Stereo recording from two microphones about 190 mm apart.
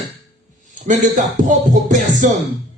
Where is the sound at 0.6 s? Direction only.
40° right (ahead or behind).